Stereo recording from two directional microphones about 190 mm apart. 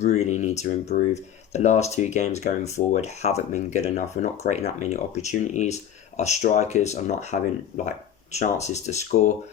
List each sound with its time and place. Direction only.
0.0 s speech: 35° left (ahead or behind)